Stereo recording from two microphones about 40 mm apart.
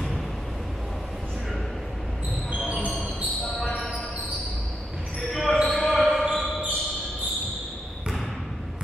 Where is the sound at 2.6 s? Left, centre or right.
Right.